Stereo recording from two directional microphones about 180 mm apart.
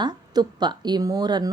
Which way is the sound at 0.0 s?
25° right (ahead or behind).